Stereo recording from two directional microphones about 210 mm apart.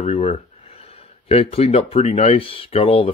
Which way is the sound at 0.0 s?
30° left (ahead or behind).